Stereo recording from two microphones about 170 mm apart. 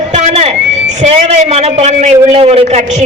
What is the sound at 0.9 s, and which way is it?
A man's voice, 40° right (ahead or behind).